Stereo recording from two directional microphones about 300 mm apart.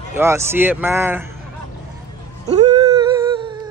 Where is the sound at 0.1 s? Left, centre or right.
Centre.